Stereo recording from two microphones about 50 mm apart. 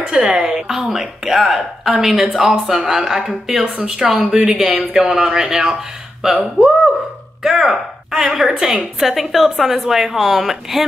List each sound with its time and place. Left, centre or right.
0.0 s a woman's voice: centre
5.0 s a woman's voice: centre